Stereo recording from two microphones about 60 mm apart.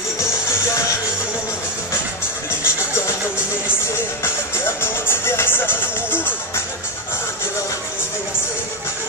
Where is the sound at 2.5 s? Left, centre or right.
Left.